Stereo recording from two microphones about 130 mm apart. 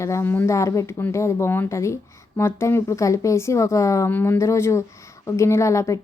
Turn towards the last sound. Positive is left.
turn(degrees=25)  # may be behind; listen again after turning